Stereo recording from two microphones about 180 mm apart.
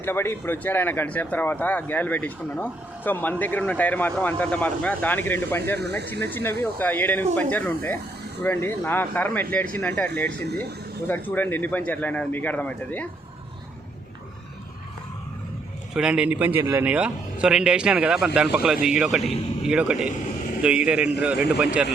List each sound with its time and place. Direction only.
0.0 s speech: 15° left (ahead or behind)
16.0 s a man's voice: 5° right (ahead or behind)